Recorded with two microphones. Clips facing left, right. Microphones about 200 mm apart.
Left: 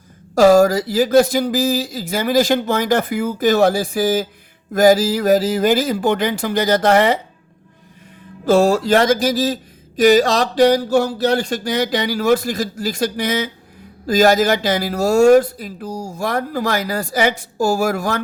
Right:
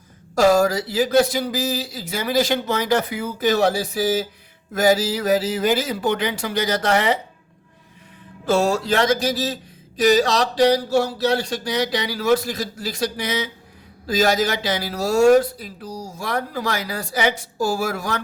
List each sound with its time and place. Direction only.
0.3 s speech: 45° left (ahead or behind)
8.4 s speech: 45° left (ahead or behind)
10.3 s speech: 45° left (ahead or behind)